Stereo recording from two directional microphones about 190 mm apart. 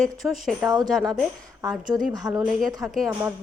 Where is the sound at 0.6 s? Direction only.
20° right (ahead or behind).